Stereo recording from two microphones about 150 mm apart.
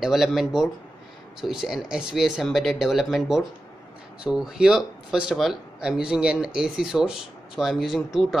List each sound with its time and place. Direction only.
0.0 s speech: centre (ahead or behind)